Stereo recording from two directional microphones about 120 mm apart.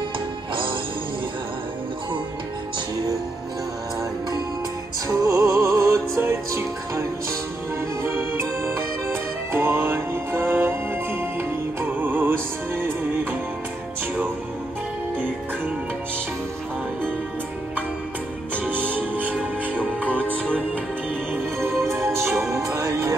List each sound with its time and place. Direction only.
5.0 s music: 25° right (ahead or behind)
18.6 s music: 15° right (ahead or behind)
20.1 s music: 10° left (ahead or behind)
21.8 s music: 20° right (ahead or behind)